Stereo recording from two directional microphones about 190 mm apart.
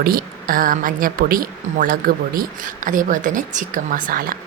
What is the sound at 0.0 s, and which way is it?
A woman's voice, 50° right (ahead or behind).